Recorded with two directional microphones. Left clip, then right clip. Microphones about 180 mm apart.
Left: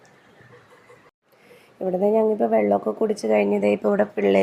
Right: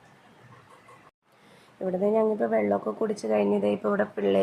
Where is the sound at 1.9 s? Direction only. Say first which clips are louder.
Left 5 dB; 15° left (ahead or behind).